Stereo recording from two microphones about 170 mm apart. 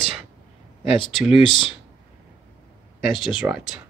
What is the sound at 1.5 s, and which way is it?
Speech, 30° left (ahead or behind).